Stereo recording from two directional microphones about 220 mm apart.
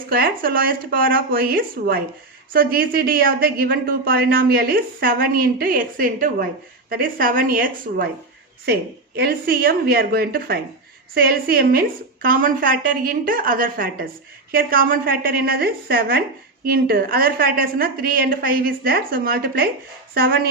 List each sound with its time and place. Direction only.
0.1 s a woman's voice: 40° right (ahead or behind)